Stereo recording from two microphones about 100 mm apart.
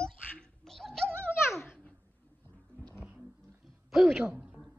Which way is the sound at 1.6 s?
15° left (ahead or behind).